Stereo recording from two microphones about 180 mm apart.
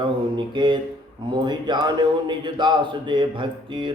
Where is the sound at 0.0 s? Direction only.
25° right (ahead or behind).